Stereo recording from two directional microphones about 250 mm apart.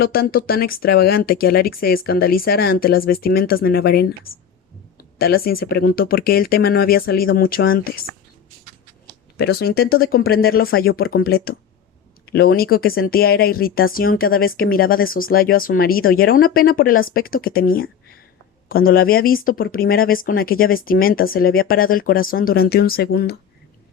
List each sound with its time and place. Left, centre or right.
0.0 s speech: left
9.4 s speech: left